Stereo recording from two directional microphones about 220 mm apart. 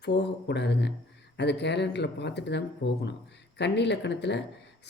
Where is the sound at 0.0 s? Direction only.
50° left (ahead or behind).